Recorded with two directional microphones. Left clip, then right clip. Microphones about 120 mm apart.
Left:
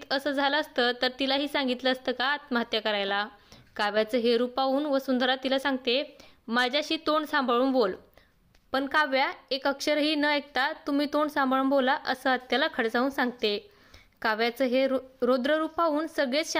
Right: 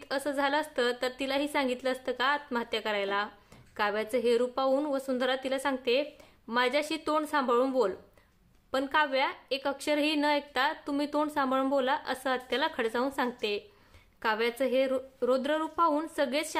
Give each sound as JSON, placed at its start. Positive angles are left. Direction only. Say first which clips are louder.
{"t": 0.0, "sound": "a woman's voice", "louder": "left 3 dB", "side_deg": 30}
{"t": 15.9, "sound": "a woman's voice", "louder": "left 2 dB", "side_deg": 25}